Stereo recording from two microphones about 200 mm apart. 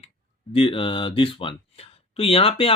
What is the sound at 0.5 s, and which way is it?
Speech, 25° left (ahead or behind).